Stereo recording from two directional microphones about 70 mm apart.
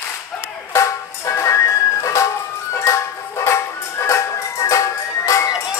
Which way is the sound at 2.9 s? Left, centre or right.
Left.